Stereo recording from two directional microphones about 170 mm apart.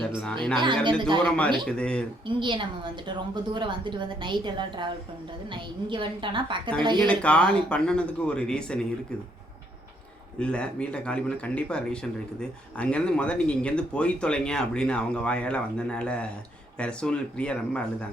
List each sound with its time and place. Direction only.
0.6 s a woman's voice: 30° right (ahead or behind)
1.6 s speech: 5° left (ahead or behind)
2.2 s a woman's voice: 30° right (ahead or behind)
5.9 s a woman's voice: 30° right (ahead or behind)
7.1 s speech: 5° left (ahead or behind)
10.4 s speech: 5° left (ahead or behind)